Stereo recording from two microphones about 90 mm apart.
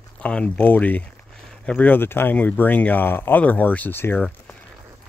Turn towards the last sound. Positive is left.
turn(degrees=25)  # may be behind; listen again after turning